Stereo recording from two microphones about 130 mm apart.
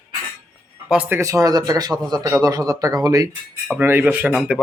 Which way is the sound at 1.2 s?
25° right (ahead or behind).